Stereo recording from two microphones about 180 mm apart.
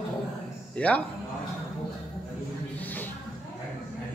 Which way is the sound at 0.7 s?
5° left (ahead or behind).